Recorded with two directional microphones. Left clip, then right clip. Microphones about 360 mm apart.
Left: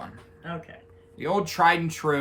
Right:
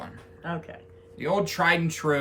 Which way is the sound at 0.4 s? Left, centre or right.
Centre.